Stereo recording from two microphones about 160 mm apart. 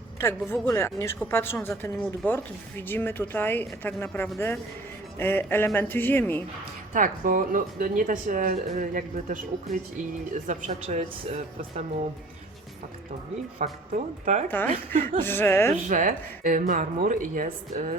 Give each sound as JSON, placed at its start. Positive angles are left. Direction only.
{"t": 0.2, "sound": "speech", "side_deg": 15}
{"t": 6.9, "sound": "speech", "side_deg": -55}
{"t": 13.6, "sound": "speech", "side_deg": -50}
{"t": 14.4, "sound": "speech", "side_deg": 10}
{"t": 15.9, "sound": "speech", "side_deg": -60}